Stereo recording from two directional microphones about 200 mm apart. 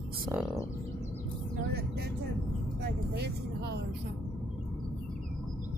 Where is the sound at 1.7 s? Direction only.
55° right (ahead or behind).